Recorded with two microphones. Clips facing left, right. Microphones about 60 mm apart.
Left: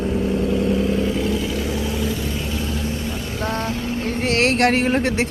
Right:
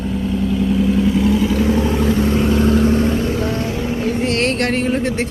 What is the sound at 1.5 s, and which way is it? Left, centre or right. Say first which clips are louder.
Vehicle: right 7 dB; right.